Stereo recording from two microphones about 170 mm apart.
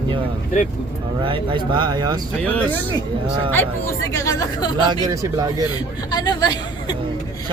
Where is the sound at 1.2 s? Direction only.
30° right (ahead or behind).